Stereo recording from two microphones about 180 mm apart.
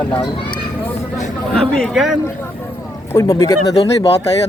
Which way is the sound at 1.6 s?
5° left (ahead or behind).